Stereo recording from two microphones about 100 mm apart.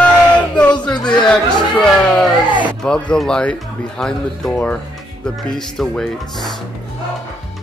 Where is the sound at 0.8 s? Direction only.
45° left (ahead or behind).